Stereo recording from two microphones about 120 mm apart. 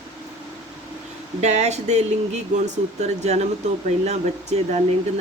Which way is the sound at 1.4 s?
70° right (ahead or behind).